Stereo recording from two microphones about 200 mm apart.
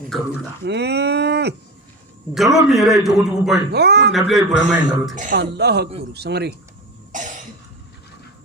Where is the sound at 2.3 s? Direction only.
Centre (ahead or behind).